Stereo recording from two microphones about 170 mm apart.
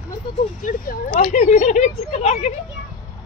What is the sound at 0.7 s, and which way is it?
Speech, 55° left (ahead or behind).